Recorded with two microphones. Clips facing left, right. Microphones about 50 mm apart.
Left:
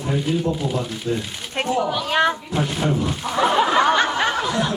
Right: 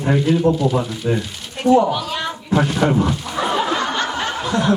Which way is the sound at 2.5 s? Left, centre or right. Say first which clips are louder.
Right 5 dB; right.